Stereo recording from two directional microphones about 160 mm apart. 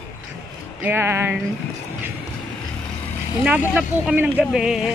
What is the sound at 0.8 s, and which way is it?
Speech, 15° right (ahead or behind).